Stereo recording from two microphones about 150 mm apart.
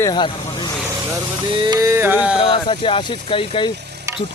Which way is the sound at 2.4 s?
35° left (ahead or behind).